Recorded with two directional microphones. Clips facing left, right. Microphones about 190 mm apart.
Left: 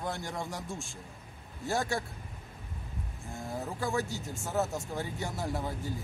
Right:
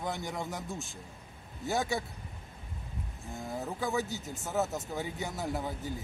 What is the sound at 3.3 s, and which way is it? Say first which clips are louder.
Speech: even; centre (ahead or behind).